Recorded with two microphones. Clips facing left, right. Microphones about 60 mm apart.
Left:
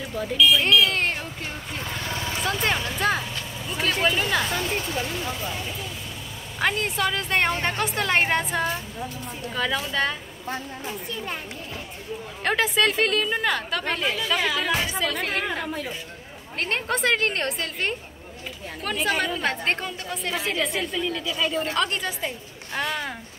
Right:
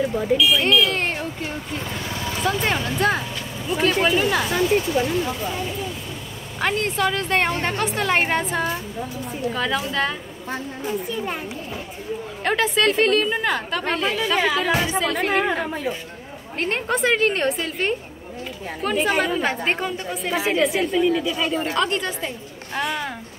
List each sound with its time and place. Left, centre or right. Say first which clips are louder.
0.0 s a woman's voice: right 9 dB; centre
0.4 s speech: left 2 dB; centre
4.6 s speech: right 8 dB; right
6.6 s speech: right 2 dB; centre
12.4 s speech: right 2 dB; centre
14.1 s a woman's voice: right 4 dB; right
15.0 s a woman's voice: right 5 dB; centre
16.5 s a woman's voice: right 3 dB; centre